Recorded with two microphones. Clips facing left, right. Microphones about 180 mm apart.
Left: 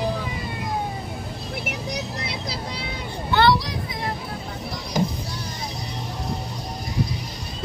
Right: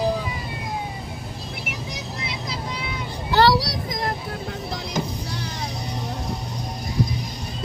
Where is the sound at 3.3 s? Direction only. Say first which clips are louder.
Right 1 dB; 40° right (ahead or behind).